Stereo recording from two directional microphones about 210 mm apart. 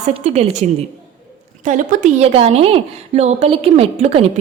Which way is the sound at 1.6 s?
35° right (ahead or behind).